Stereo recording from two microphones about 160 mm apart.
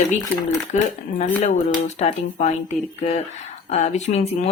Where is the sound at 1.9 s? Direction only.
45° left (ahead or behind).